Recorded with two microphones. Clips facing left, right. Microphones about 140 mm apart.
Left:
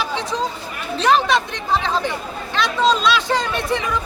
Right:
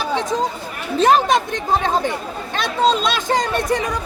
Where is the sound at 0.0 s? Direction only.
45° right (ahead or behind).